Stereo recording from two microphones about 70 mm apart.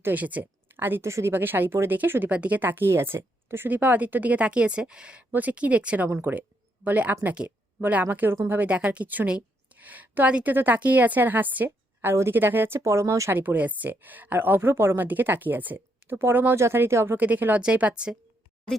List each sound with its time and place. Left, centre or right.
0.0 s speech: right
1.0 s speech: right
2.3 s a woman's voice: centre
2.6 s a woman's voice: right
6.3 s a woman's voice: right
13.3 s a woman's voice: right
17.2 s a woman's voice: right